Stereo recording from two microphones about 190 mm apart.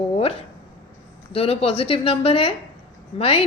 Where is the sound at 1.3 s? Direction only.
30° left (ahead or behind).